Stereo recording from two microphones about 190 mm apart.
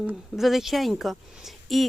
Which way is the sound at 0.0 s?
5° right (ahead or behind).